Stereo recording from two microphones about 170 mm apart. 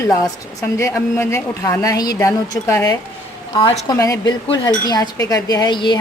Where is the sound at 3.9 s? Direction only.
20° left (ahead or behind).